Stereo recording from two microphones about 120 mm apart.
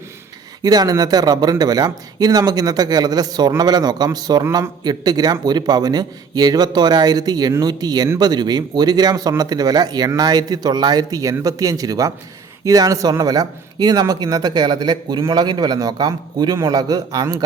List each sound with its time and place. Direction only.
0.6 s speech: 35° right (ahead or behind)
4.4 s speech: 20° right (ahead or behind)
4.8 s speech: 35° right (ahead or behind)